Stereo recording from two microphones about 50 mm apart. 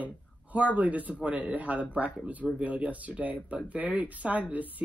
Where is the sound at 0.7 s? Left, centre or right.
Right.